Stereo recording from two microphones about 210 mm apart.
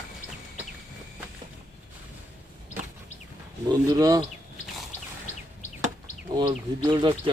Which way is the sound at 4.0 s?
15° right (ahead or behind).